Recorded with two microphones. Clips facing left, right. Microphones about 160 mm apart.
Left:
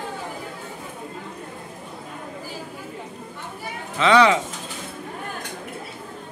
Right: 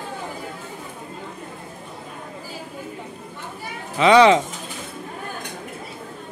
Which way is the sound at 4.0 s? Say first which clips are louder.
Right 3 dB; 20° right (ahead or behind).